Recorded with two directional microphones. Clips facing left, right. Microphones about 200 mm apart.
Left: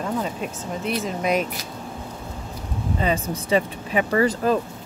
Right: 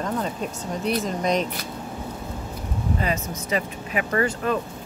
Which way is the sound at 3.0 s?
30° left (ahead or behind).